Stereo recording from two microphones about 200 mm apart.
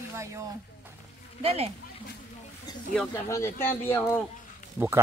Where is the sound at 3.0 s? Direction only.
15° left (ahead or behind).